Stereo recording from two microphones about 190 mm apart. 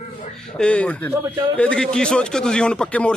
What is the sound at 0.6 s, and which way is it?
Speech, 5° left (ahead or behind).